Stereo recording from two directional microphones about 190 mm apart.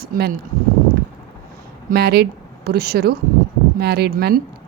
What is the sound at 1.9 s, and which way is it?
A woman's voice, 60° right (ahead or behind).